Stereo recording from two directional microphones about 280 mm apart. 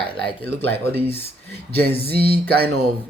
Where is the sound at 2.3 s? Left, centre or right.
Right.